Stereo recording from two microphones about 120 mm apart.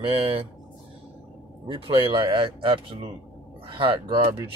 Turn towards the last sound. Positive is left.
turn(degrees=-45)  # may be behind; listen again after turning